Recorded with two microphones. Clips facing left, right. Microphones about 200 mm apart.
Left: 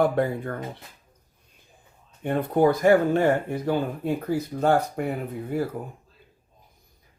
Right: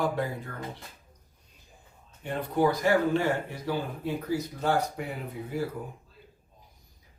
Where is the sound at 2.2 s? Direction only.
55° left (ahead or behind).